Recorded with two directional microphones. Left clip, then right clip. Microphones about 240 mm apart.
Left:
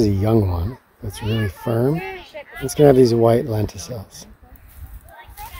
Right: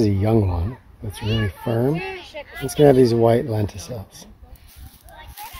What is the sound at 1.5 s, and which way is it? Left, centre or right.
Speech, centre.